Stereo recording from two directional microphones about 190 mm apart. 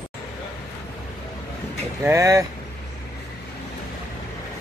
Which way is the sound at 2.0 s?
15° right (ahead or behind).